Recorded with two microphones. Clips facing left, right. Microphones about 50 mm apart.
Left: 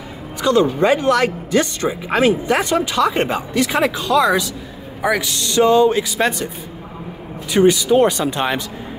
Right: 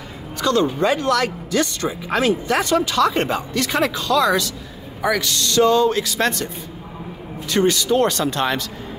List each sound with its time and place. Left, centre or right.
0.4 s speech: centre
7.5 s speech: centre